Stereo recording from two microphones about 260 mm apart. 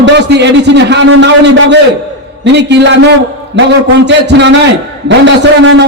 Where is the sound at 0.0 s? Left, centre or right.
Right.